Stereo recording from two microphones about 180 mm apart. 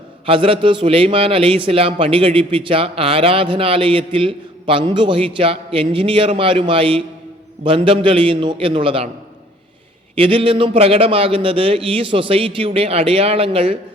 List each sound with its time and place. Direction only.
0.3 s a man's voice: 30° right (ahead or behind)
10.2 s a man's voice: 30° right (ahead or behind)